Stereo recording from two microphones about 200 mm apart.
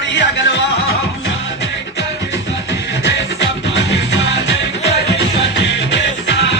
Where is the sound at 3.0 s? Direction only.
60° left (ahead or behind).